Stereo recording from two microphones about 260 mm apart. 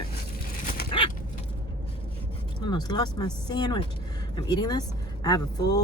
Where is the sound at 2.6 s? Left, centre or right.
Centre.